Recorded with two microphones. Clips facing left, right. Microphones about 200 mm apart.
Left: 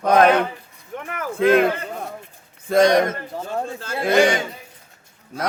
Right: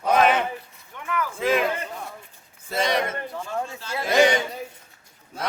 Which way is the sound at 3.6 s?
50° left (ahead or behind).